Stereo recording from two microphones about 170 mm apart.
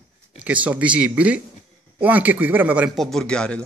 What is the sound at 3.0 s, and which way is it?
Speech, 5° left (ahead or behind).